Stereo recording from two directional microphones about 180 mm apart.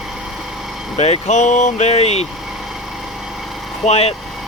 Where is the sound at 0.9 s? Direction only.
35° left (ahead or behind).